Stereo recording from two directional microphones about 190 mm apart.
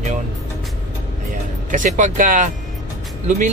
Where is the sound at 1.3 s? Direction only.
40° right (ahead or behind).